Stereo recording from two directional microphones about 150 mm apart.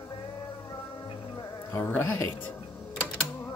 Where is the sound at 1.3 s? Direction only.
20° left (ahead or behind).